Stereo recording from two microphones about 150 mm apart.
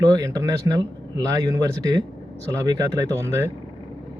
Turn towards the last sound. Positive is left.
turn(degrees=-15)  # may be behind; listen again after turning